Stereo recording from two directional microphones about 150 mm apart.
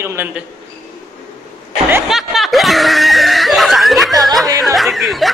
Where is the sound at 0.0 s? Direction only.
15° right (ahead or behind).